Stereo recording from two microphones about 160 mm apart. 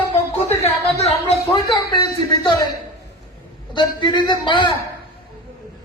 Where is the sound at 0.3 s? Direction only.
40° left (ahead or behind).